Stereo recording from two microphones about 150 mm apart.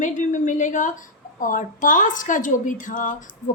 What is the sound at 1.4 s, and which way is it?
A woman's voice, 60° left (ahead or behind).